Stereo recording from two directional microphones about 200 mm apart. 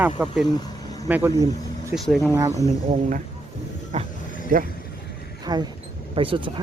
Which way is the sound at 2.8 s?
35° right (ahead or behind).